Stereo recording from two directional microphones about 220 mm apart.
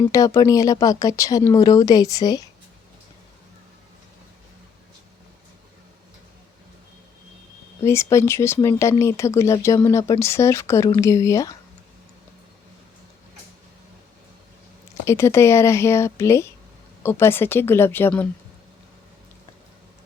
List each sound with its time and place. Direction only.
0.1 s speech: 15° left (ahead or behind)
7.9 s speech: 10° left (ahead or behind)
15.0 s speech: 10° left (ahead or behind)